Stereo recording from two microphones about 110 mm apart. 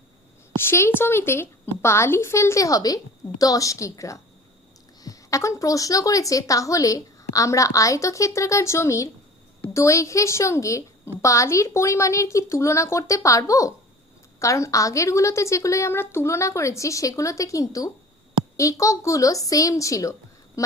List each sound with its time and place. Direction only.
0.5 s a woman's voice: 20° left (ahead or behind)